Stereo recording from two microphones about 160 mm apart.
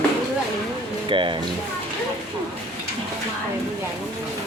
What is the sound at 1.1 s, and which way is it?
Speech, 30° right (ahead or behind).